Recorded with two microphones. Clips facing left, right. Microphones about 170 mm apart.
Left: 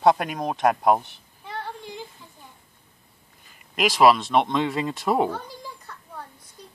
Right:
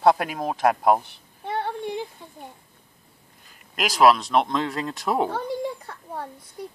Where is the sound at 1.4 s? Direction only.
60° right (ahead or behind).